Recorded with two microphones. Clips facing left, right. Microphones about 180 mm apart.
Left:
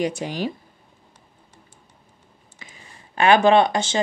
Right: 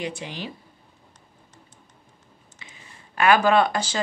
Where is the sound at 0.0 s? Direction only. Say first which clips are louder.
Left 7 dB; 40° left (ahead or behind).